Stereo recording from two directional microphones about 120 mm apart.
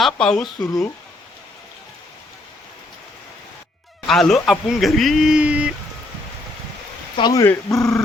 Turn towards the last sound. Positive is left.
turn(degrees=30)  # may be behind; listen again after turning